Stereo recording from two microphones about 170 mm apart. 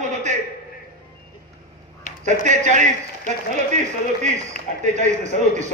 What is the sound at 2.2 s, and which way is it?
Speech, 45° right (ahead or behind).